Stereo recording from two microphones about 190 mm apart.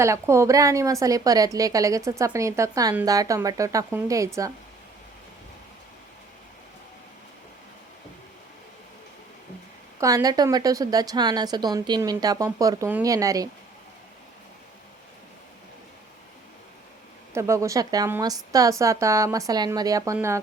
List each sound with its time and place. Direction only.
0.0 s a woman's voice: 15° right (ahead or behind)
10.0 s a woman's voice: 20° right (ahead or behind)
17.3 s a woman's voice: 15° right (ahead or behind)